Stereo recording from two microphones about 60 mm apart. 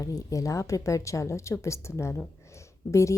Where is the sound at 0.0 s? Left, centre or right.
Left.